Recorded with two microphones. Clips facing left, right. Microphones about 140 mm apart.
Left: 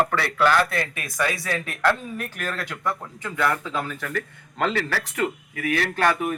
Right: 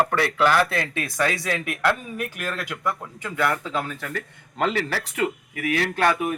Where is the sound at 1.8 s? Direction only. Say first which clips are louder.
Left 1 dB; 5° right (ahead or behind).